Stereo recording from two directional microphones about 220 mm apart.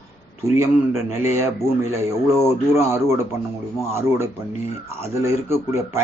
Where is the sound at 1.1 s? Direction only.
10° right (ahead or behind).